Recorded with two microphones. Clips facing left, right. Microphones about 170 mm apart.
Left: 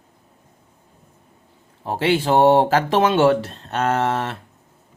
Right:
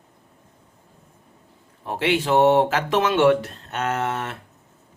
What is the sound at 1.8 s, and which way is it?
Speech, 30° left (ahead or behind).